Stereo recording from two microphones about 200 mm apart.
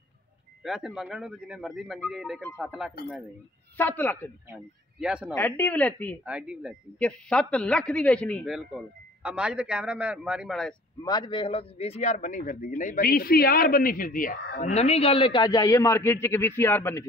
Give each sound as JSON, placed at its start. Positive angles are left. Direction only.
{"t": 0.7, "sound": "a man's voice", "side_deg": 0}
{"t": 3.7, "sound": "a woman's voice", "side_deg": 10}
{"t": 5.0, "sound": "a man's voice", "side_deg": -5}
{"t": 5.3, "sound": "a woman's voice", "side_deg": 10}
{"t": 6.2, "sound": "a man's voice", "side_deg": -5}
{"t": 11.0, "sound": "a man's voice", "side_deg": 20}